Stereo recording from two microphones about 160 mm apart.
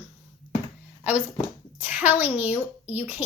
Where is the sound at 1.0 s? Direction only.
10° right (ahead or behind).